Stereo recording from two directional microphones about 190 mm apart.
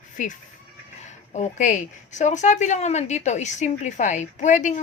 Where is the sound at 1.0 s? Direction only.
35° left (ahead or behind).